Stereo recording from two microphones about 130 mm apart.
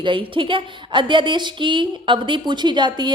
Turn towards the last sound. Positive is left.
turn(degrees=-35)  # may be behind; listen again after turning